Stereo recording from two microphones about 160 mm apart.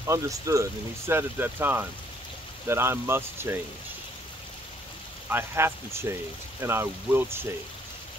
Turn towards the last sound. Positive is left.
turn(degrees=-15)  # may be behind; listen again after turning